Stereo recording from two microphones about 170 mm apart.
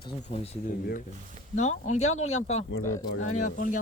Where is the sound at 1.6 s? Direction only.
45° left (ahead or behind).